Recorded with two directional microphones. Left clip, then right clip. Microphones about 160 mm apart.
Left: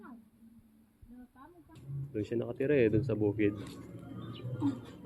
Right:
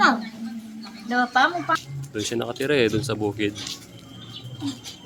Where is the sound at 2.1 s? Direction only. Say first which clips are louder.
Right 8 dB; 25° right (ahead or behind).